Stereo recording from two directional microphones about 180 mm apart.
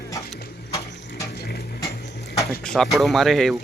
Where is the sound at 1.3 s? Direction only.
65° left (ahead or behind).